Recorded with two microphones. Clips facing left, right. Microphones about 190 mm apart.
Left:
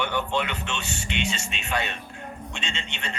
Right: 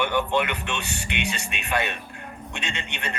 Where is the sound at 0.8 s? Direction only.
65° right (ahead or behind).